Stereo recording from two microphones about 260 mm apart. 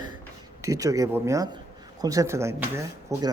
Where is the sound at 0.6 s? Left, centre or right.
Centre.